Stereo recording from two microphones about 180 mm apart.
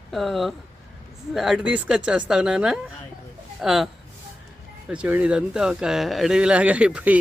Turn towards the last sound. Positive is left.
turn(degrees=-5)  # may be behind; listen again after turning